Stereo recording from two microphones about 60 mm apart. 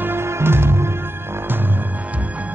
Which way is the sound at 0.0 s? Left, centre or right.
Right.